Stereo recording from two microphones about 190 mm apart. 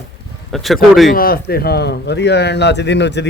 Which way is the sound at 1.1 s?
50° left (ahead or behind).